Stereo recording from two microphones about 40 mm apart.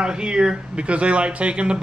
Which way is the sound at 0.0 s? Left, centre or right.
Right.